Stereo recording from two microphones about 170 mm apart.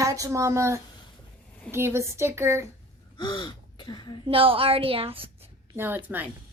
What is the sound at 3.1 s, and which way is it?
Gasp, 25° left (ahead or behind).